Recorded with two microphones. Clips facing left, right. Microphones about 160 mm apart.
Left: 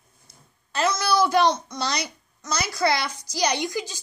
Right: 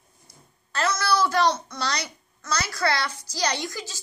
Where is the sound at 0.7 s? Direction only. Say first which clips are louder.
Left 2 dB; 20° left (ahead or behind).